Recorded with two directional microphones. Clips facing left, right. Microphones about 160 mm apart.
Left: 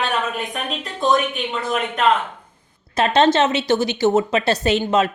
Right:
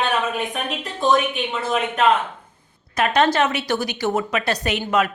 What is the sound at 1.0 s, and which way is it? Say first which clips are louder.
Speech: even; 5° right (ahead or behind).